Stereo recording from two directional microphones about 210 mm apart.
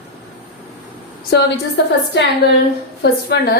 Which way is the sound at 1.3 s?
50° left (ahead or behind).